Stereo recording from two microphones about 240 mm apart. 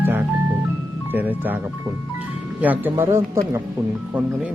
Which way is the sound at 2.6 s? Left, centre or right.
Centre.